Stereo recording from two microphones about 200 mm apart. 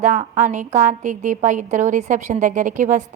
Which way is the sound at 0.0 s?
35° right (ahead or behind).